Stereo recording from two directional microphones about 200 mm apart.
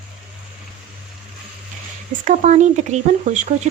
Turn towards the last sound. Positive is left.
turn(degrees=-35)  # may be behind; listen again after turning